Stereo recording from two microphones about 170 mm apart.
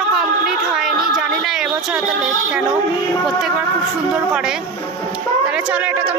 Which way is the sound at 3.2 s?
Centre (ahead or behind).